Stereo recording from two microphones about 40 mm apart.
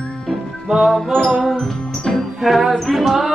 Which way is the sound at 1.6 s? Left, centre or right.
Centre.